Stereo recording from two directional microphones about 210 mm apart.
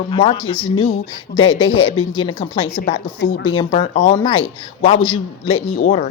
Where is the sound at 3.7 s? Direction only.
40° left (ahead or behind).